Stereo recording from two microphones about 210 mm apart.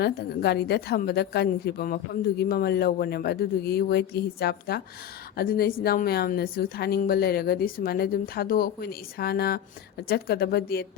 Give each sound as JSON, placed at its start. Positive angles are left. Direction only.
{"t": 0.0, "sound": "a woman's voice", "side_deg": 50}